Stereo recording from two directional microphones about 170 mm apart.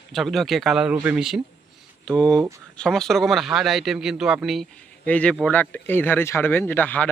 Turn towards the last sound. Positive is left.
turn(degrees=10)  # may be behind; listen again after turning